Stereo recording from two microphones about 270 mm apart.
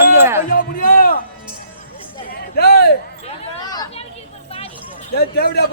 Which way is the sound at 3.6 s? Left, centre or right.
Centre.